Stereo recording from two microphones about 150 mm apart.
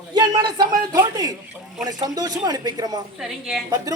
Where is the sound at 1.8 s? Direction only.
25° right (ahead or behind).